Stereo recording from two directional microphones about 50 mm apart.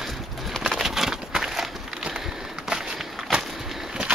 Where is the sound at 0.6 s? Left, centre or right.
Centre.